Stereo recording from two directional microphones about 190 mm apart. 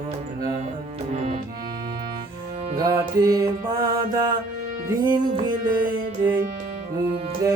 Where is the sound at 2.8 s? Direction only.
20° right (ahead or behind).